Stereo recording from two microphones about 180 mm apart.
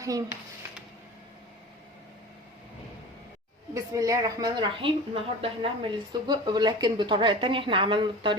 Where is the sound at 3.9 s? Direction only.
20° right (ahead or behind).